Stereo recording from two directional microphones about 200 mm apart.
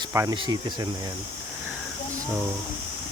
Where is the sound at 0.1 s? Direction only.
15° right (ahead or behind).